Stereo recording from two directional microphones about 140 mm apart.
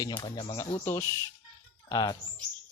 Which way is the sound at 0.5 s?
20° left (ahead or behind).